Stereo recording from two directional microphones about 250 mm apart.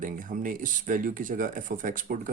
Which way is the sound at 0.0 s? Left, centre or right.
Right.